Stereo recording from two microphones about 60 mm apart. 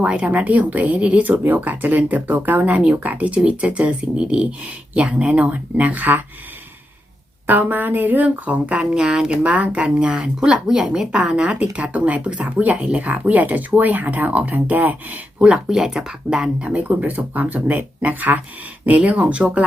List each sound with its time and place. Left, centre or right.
0.0 s speech: centre; by 2.7 s right
2.7 s speech: centre
7.4 s speech: right; by 9.4 s centre
9.4 s speech: right
15.7 s speech: centre